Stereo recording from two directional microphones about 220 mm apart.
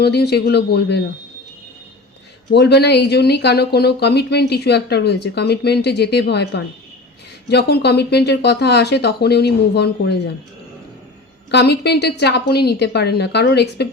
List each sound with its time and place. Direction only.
0.0 s speech: 50° left (ahead or behind)
2.5 s speech: 50° left (ahead or behind)
11.5 s speech: 50° left (ahead or behind)